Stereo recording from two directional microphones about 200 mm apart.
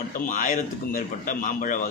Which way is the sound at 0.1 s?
40° left (ahead or behind).